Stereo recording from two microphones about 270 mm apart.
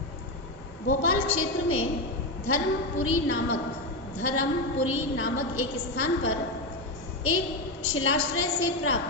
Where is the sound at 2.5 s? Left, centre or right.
Left.